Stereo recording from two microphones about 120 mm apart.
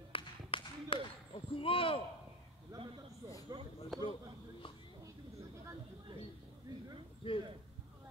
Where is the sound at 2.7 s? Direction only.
30° right (ahead or behind).